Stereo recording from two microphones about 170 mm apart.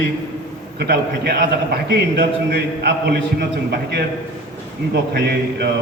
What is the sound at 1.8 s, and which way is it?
A man's voice, 80° right.